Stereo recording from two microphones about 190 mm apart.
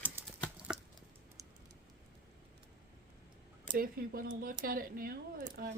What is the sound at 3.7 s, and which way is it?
Speech, 50° right (ahead or behind).